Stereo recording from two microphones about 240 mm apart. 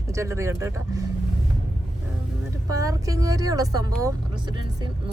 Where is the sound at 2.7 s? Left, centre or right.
Centre.